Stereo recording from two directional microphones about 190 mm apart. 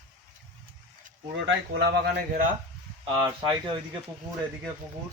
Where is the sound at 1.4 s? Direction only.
70° right (ahead or behind).